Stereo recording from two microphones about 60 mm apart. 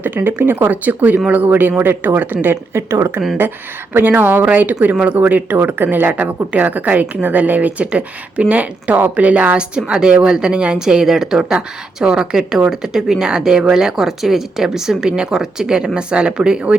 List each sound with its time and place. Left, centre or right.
0.0 s speech: right
3.9 s a woman's voice: right; by 16.7 s centre